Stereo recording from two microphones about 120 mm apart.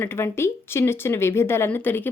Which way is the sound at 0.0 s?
20° left (ahead or behind).